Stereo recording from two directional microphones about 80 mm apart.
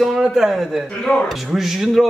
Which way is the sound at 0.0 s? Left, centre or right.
Centre.